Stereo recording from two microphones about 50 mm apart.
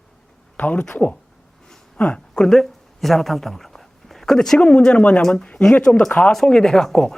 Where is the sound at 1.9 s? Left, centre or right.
Centre.